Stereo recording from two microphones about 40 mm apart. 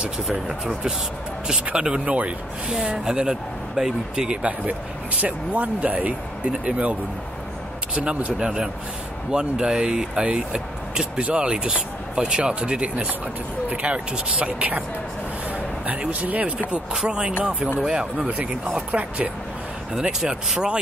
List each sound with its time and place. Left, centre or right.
1.7 s speech: right
2.0 s speech: right
3.1 s speech: centre
4.4 s speech: right
9.3 s speech: right
16.1 s speech: right
16.9 s speech: centre
18.8 s speech: right
20.0 s speech: centre